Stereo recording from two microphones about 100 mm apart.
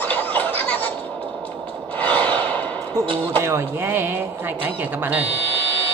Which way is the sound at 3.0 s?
60° right (ahead or behind).